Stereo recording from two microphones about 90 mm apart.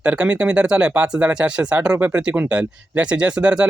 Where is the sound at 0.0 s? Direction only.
15° right (ahead or behind).